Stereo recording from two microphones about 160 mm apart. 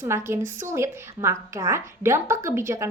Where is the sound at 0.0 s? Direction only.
15° right (ahead or behind).